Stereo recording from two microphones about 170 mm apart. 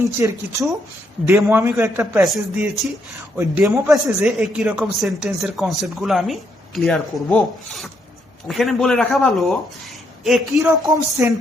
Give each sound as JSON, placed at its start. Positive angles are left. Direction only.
{"t": 0.0, "sound": "a man's voice", "side_deg": -20}
{"t": 2.2, "sound": "speech", "side_deg": 0}
{"t": 3.3, "sound": "a man's voice", "side_deg": -10}
{"t": 10.7, "sound": "a man's voice", "side_deg": -15}